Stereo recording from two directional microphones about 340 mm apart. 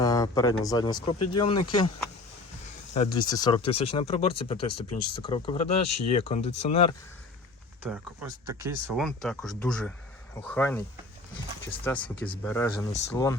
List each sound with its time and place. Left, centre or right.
0.0 s speech: centre
7.8 s speech: centre
11.9 s speech: centre